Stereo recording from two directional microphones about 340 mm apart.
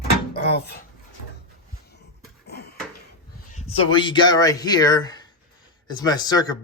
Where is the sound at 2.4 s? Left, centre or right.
Left.